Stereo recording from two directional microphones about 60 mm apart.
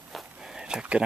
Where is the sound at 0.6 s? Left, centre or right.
Centre.